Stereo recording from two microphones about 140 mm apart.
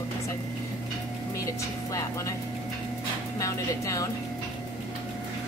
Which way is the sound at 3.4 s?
20° left (ahead or behind).